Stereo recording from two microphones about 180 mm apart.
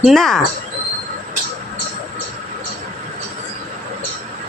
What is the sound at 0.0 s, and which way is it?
Speech, centre (ahead or behind).